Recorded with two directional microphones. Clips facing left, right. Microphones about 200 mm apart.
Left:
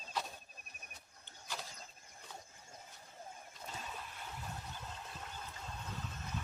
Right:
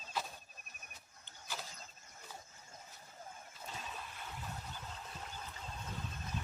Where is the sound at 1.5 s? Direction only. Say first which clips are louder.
Even; 5° right (ahead or behind).